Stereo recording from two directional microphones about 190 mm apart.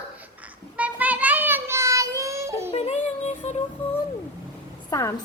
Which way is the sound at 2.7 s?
35° left (ahead or behind).